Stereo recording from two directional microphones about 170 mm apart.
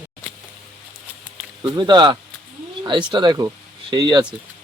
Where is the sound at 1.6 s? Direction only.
25° right (ahead or behind).